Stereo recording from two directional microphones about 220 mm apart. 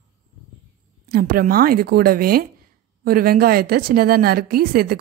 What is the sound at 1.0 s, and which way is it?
A woman's voice, 45° right (ahead or behind).